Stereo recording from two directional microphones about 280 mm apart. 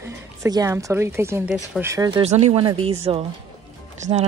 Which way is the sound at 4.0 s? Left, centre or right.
Right.